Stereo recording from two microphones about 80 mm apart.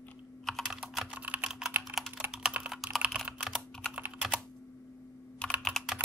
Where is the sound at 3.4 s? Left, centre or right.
Centre.